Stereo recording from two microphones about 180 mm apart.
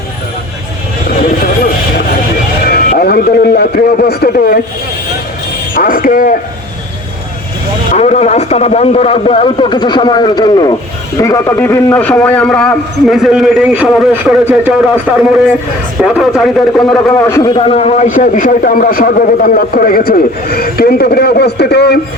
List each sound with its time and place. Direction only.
2.6 s a man's voice: 55° left (ahead or behind)
5.7 s a man's voice: 50° left (ahead or behind)
7.9 s a man's voice: 40° left (ahead or behind); by 14.7 s 5° right (ahead or behind)
16.0 s a man's voice: centre (ahead or behind)
17.2 s a man's voice: 15° left (ahead or behind)
17.5 s a man's voice: 30° left (ahead or behind); by 21.9 s 65° left (ahead or behind)